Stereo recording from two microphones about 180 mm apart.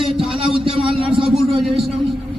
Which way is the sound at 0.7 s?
30° right (ahead or behind).